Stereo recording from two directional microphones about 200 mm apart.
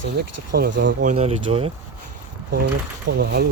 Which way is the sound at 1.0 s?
35° right (ahead or behind).